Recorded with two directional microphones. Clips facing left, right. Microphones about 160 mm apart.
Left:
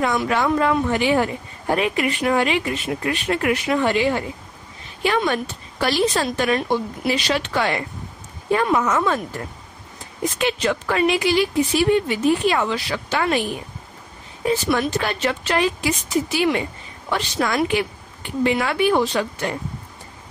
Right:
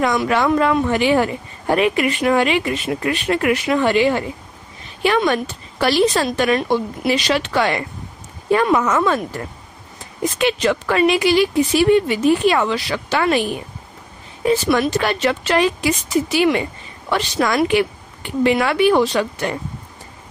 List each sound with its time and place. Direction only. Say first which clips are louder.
0.0 s speech: right 3 dB; 85° right
8.5 s speech: right 3 dB; 90° right
10.4 s speech: right 4 dB; 80° right
14.5 s speech: right 4 dB; 85° right